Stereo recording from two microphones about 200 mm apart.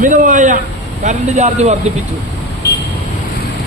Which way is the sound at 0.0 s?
40° right (ahead or behind).